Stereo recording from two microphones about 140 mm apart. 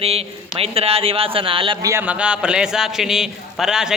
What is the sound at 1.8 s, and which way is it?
Speech, 25° right (ahead or behind).